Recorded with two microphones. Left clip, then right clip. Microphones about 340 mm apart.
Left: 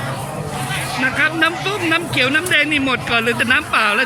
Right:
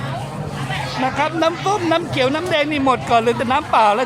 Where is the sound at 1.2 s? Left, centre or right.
Centre.